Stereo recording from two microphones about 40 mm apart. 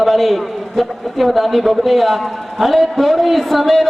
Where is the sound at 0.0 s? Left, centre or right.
Centre.